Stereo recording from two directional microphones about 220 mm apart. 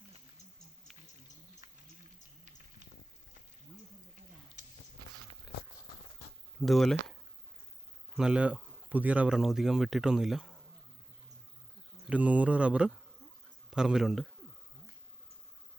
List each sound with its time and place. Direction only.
4.6 s a sound: 35° right (ahead or behind)
6.6 s speech: centre (ahead or behind)
8.1 s speech: 5° right (ahead or behind)
12.0 s speech: 5° right (ahead or behind)